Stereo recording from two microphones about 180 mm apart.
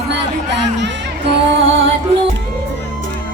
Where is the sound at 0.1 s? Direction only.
75° right (ahead or behind).